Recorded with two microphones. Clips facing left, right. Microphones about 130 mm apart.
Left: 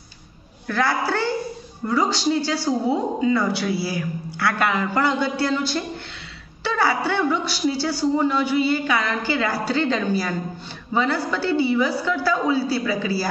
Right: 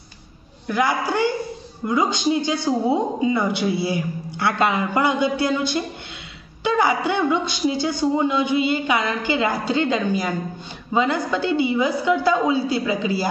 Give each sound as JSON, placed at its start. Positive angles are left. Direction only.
{"t": 0.7, "sound": "a woman's voice", "side_deg": -15}